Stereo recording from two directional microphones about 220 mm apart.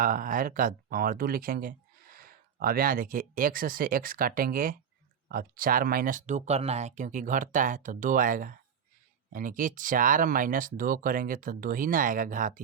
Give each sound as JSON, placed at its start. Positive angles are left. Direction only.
{"t": 0.0, "sound": "speech", "side_deg": -40}